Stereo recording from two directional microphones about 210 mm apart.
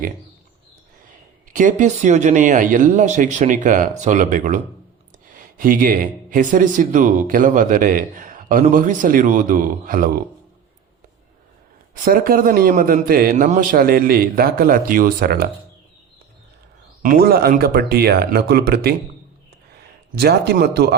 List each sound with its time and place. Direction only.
1.5 s a man's voice: 35° right (ahead or behind)
12.0 s a man's voice: 45° right (ahead or behind)
17.0 s a man's voice: 45° right (ahead or behind)
20.1 s a man's voice: 50° right (ahead or behind)